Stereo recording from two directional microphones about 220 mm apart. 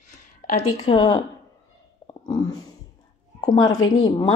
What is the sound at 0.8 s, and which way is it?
Speech, 25° left (ahead or behind).